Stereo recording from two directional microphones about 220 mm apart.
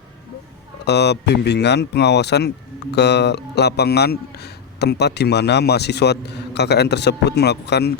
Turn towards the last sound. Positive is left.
turn(degrees=50)  # may be behind; listen again after turning